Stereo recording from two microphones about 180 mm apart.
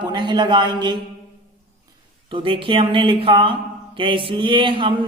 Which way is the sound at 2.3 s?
30° right (ahead or behind).